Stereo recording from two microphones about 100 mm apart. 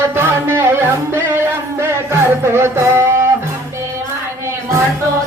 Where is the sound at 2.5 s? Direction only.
25° right (ahead or behind).